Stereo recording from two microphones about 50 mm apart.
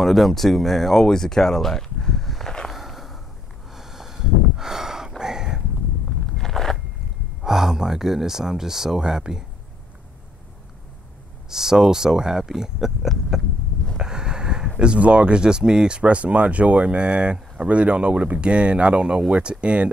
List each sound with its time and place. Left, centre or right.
0.0 s speech: centre
2.7 s a sound: centre
3.7 s snort: centre
5.2 s a sound: centre
6.3 s walk: centre
7.4 s speech: centre
11.5 s speech: centre
13.9 s a sound: centre
14.8 s speech: right